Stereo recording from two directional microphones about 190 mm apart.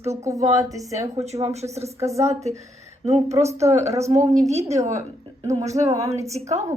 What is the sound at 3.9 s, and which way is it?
Speech, 15° right (ahead or behind).